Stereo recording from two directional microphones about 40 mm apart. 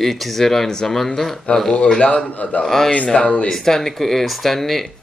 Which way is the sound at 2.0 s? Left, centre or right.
Left.